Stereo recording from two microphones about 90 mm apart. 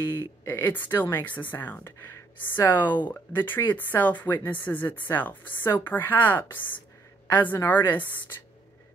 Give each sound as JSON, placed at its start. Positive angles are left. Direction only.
{"t": 0.5, "sound": "speech", "side_deg": 25}